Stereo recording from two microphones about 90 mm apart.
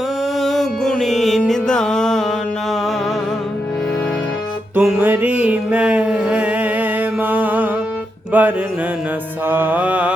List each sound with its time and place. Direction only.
0.3 s music: centre (ahead or behind)
4.7 s music: 15° right (ahead or behind)
8.3 s mantra: 20° right (ahead or behind)